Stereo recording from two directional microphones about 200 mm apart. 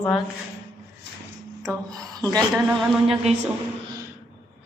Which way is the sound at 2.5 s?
5° right (ahead or behind).